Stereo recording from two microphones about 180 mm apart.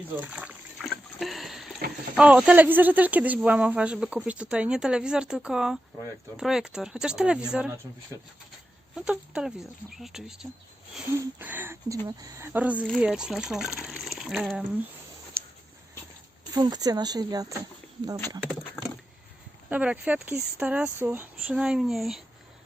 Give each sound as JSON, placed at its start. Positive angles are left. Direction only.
{"t": 0.2, "sound": "trickle", "side_deg": -5}
{"t": 2.1, "sound": "speech", "side_deg": -5}
{"t": 9.0, "sound": "speech", "side_deg": -5}
{"t": 15.4, "sound": "a sound", "side_deg": -15}
{"t": 16.5, "sound": "speech", "side_deg": -20}
{"t": 19.7, "sound": "speech", "side_deg": -5}